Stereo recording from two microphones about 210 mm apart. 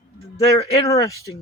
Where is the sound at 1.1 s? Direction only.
15° left (ahead or behind).